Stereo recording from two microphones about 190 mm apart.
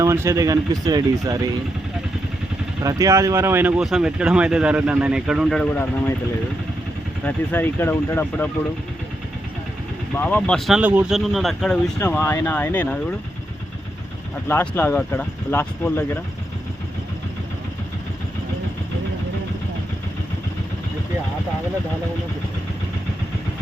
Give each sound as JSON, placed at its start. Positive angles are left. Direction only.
{"t": 0.0, "sound": "speech", "side_deg": -15}
{"t": 2.8, "sound": "speech", "side_deg": -15}
{"t": 7.3, "sound": "speech", "side_deg": 10}
{"t": 10.2, "sound": "speech", "side_deg": 10}
{"t": 10.8, "sound": "speech", "side_deg": -5}
{"t": 12.1, "sound": "speech", "side_deg": 15}
{"t": 14.4, "sound": "speech", "side_deg": 10}